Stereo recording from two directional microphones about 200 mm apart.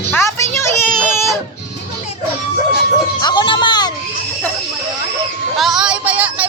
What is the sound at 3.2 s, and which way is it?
Music, 20° left (ahead or behind).